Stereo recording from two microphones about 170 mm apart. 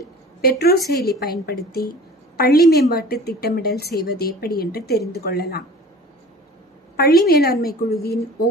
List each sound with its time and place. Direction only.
0.4 s a woman's voice: 65° left (ahead or behind)
7.0 s a woman's voice: 65° left (ahead or behind)